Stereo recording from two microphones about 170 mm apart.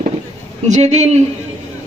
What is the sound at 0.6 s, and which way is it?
Speech, 40° right (ahead or behind).